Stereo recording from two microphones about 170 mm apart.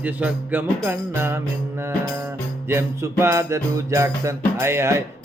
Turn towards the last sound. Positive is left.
turn(degrees=-15)  # may be behind; listen again after turning